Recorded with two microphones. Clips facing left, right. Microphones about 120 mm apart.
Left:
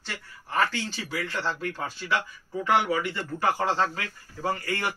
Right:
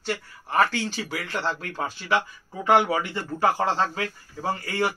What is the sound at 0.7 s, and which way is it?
Speech, 15° right (ahead or behind).